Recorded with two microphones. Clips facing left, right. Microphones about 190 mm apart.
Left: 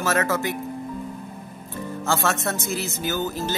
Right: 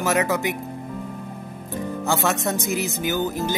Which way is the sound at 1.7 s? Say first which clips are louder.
Right 2 dB; 15° right (ahead or behind).